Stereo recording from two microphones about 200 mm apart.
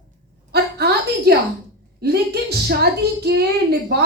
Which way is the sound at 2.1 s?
50° right (ahead or behind).